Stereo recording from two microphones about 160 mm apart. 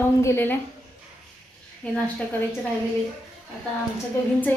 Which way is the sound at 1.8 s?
5° left (ahead or behind).